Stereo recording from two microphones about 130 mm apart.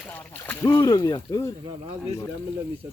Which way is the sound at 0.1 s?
15° left (ahead or behind).